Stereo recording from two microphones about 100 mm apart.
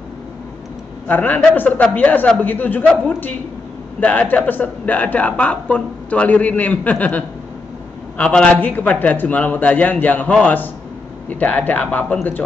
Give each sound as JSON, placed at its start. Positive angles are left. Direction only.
{"t": 1.0, "sound": "a man's voice", "side_deg": 15}